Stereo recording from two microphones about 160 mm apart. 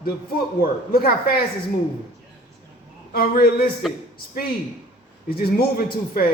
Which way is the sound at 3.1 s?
65° left (ahead or behind).